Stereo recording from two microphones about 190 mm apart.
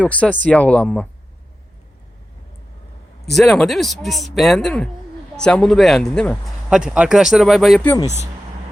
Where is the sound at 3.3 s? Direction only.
Centre (ahead or behind).